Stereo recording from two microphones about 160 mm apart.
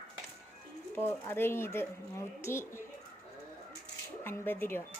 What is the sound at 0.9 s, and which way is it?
A woman's voice, 15° left (ahead or behind).